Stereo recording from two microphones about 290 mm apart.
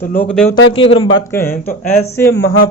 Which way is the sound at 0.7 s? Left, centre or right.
Centre.